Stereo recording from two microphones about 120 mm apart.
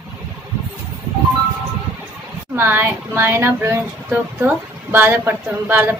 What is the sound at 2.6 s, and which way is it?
Speech, 15° right (ahead or behind).